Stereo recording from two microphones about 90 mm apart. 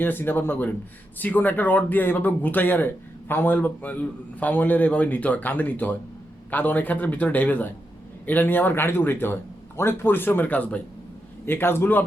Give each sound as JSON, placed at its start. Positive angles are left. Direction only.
{"t": 0.0, "sound": "speech", "side_deg": 20}